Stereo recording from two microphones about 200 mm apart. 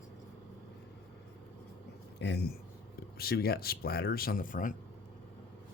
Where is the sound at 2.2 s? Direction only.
60° left (ahead or behind); by 4.8 s 40° left (ahead or behind).